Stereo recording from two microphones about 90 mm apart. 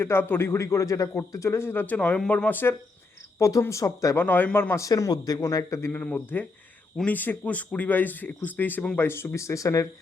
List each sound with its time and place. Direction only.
0.0 s a man's voice: 25° left (ahead or behind)
3.3 s speech: 35° left (ahead or behind)
4.2 s a man's voice: 20° left (ahead or behind)
4.7 s speech: 35° left (ahead or behind)
5.9 s a man's voice: 20° left (ahead or behind); by 9.8 s 35° left (ahead or behind)